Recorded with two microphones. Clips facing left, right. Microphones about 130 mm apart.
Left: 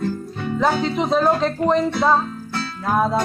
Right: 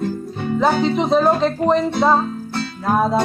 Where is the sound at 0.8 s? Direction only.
25° right (ahead or behind).